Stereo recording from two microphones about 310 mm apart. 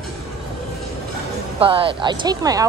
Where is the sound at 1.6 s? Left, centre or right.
Centre.